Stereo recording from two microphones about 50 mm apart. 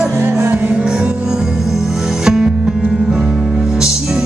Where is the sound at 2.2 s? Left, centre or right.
Centre.